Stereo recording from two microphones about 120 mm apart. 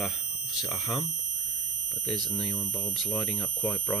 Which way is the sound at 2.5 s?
15° left (ahead or behind).